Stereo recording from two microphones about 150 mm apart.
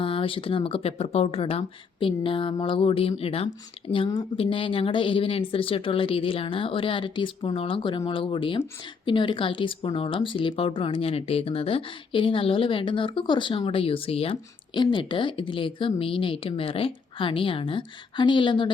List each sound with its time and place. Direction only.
0.0 s speech: 35° left (ahead or behind)